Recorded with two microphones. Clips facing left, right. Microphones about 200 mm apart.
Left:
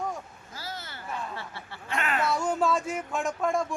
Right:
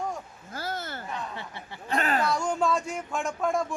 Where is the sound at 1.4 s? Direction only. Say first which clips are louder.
Right 1 dB; 20° right (ahead or behind).